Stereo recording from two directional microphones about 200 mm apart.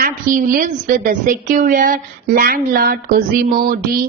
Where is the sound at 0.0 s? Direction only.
45° right (ahead or behind).